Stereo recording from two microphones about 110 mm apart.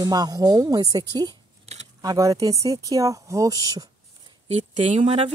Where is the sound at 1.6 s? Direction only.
90° right.